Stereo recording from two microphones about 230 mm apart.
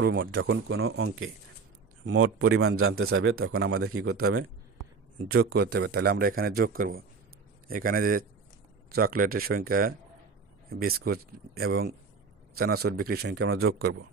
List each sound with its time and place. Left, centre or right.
0.0 s speech: right
2.0 s speech: right
5.5 s a man's voice: right